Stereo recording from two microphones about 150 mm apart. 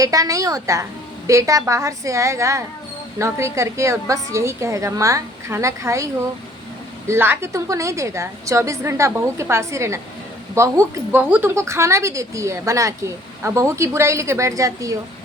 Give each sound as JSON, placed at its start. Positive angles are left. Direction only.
{"t": 0.0, "sound": "speech", "side_deg": -25}
{"t": 7.1, "sound": "speech", "side_deg": -15}